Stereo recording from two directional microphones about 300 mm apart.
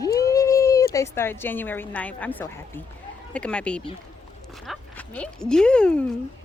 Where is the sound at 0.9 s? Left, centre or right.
Centre.